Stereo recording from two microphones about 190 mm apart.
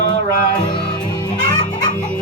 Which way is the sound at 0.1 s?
20° left (ahead or behind).